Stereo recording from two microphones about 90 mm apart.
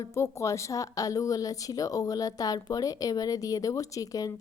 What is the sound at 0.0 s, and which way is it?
Speech, 35° left (ahead or behind).